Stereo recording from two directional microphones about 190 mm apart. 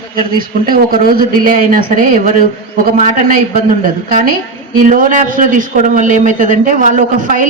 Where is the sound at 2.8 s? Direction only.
45° right (ahead or behind).